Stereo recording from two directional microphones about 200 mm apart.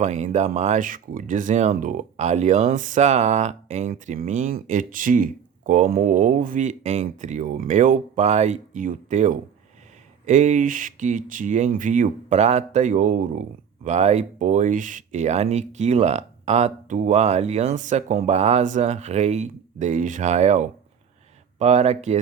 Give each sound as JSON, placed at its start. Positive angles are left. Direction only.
{"t": 0.0, "sound": "speech", "side_deg": -35}